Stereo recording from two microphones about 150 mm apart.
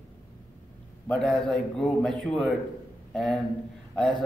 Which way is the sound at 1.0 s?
5° left (ahead or behind).